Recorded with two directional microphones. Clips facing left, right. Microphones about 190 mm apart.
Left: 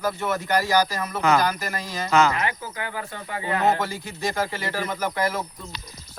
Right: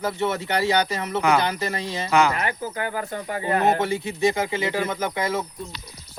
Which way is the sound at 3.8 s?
20° right (ahead or behind).